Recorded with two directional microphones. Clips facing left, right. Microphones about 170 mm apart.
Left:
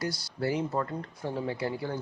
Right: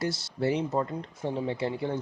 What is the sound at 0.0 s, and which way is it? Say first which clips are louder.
Speech: right 3 dB; 25° right (ahead or behind).